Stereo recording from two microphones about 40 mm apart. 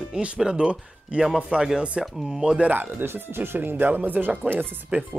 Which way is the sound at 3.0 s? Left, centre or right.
Right.